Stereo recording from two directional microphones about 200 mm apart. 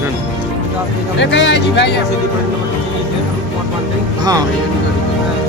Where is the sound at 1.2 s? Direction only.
65° left (ahead or behind).